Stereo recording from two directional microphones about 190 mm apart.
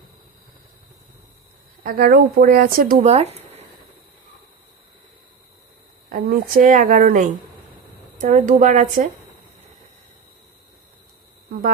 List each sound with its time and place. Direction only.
1.8 s speech: 50° right (ahead or behind)
3.1 s a sound: 35° right (ahead or behind)
6.1 s speech: 45° right (ahead or behind)